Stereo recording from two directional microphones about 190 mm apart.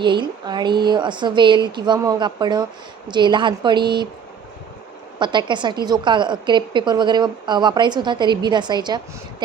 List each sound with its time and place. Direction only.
0.0 s a woman's voice: 25° right (ahead or behind)
5.2 s a woman's voice: 25° right (ahead or behind)